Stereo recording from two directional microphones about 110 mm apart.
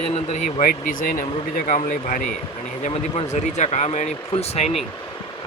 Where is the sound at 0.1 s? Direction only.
80° left.